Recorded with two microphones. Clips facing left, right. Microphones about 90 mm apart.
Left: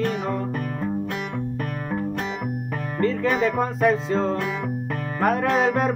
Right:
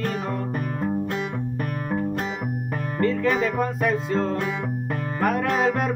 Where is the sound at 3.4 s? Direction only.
20° left (ahead or behind).